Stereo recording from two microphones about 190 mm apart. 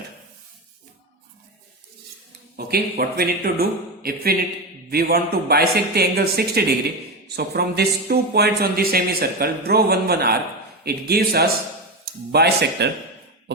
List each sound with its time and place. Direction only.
2.6 s speech: 55° right (ahead or behind)